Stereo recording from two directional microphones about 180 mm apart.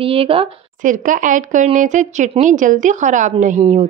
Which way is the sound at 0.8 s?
45° right (ahead or behind).